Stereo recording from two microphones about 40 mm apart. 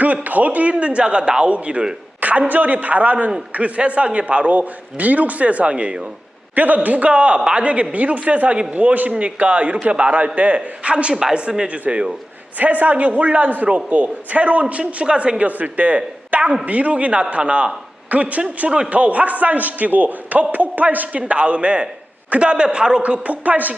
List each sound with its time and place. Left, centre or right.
0.0 s a man's voice: right
5.7 s speech: right
6.6 s a man's voice: right
11.1 s speech: centre
11.3 s speech: right
12.5 s a man's voice: right